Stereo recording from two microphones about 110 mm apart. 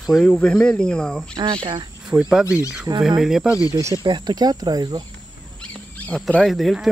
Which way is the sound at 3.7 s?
30° right (ahead or behind).